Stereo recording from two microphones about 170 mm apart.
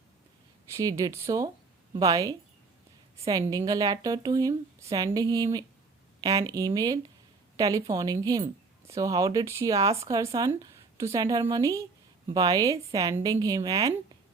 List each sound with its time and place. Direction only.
0.7 s speech: 20° right (ahead or behind)